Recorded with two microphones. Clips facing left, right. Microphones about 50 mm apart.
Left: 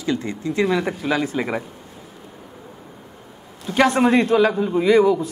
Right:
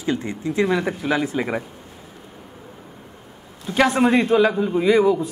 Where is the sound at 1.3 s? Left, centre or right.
Centre.